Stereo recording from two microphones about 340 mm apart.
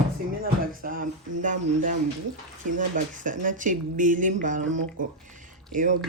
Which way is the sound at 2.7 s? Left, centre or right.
Right.